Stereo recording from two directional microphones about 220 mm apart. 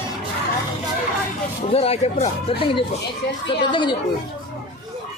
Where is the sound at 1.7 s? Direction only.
25° left (ahead or behind).